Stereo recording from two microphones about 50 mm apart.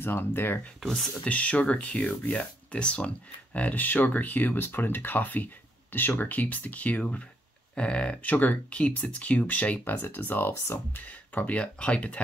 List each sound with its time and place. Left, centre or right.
0.0 s speech: left
1.3 s speech: left
7.0 s speech: centre
8.3 s speech: left
10.0 s speech: left
11.4 s speech: left